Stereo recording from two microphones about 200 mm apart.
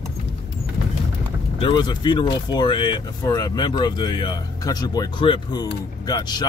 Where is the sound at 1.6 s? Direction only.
20° left (ahead or behind).